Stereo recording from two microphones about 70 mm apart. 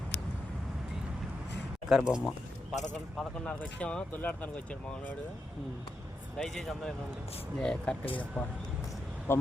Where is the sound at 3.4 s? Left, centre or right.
Centre.